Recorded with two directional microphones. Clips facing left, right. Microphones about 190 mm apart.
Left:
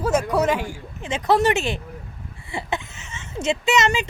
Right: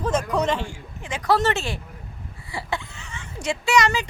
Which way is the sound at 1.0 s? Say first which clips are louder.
Left 3 dB; 25° left (ahead or behind).